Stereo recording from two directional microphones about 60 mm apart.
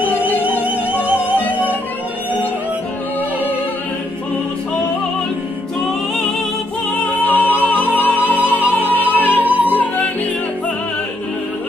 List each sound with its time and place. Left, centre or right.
1.4 s music: left
6.9 s music: left
9.4 s music: right
9.8 s music: left